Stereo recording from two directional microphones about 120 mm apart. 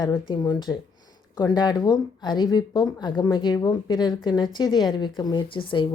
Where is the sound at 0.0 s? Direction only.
35° left (ahead or behind).